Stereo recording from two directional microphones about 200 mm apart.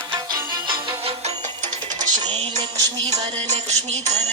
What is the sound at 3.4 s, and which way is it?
Music, 35° right (ahead or behind).